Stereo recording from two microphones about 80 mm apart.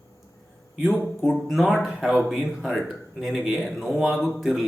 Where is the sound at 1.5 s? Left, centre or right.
Centre.